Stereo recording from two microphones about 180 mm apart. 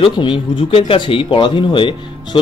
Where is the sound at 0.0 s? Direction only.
25° left (ahead or behind).